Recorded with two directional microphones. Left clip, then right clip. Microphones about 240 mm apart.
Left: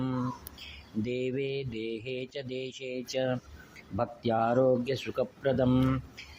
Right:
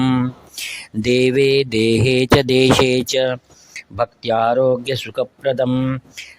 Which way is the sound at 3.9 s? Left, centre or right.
Right.